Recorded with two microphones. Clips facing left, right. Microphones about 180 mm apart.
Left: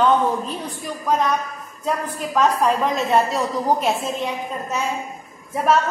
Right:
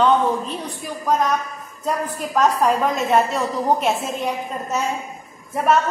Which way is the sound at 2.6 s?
Centre (ahead or behind).